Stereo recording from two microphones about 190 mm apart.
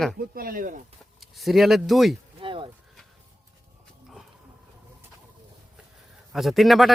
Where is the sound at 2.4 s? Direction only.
25° right (ahead or behind).